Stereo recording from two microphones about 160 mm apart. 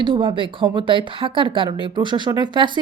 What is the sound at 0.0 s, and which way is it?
Speech, 30° right (ahead or behind).